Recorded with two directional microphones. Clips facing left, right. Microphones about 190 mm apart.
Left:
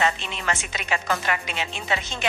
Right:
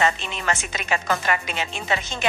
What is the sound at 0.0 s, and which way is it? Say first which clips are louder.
Speech: right 2 dB; 45° right (ahead or behind).